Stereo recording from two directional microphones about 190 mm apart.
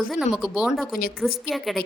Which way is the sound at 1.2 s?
Centre (ahead or behind).